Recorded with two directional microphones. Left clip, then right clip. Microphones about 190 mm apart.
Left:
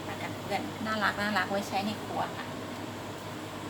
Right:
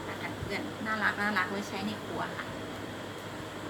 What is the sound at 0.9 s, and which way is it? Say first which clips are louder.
Speech: even; 20° left (ahead or behind).